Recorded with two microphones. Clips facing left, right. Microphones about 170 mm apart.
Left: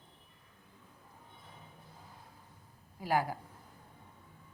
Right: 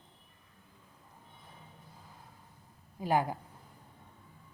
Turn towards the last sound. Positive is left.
turn(degrees=-20)  # may be behind; listen again after turning